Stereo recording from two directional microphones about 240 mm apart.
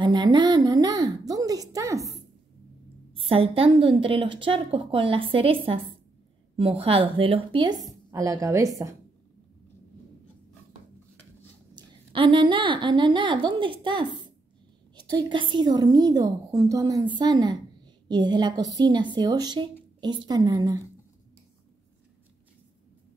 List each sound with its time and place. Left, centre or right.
0.0 s a woman's voice: centre
11.7 s a woman's voice: right